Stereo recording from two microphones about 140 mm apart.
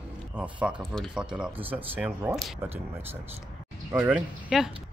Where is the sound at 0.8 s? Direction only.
5° left (ahead or behind).